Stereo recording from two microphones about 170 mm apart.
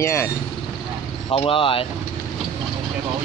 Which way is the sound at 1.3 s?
30° left (ahead or behind).